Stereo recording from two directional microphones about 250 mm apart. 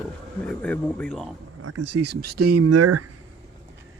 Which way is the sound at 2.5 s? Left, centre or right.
Right.